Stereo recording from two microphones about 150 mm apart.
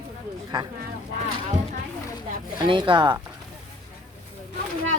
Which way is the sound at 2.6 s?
35° right (ahead or behind).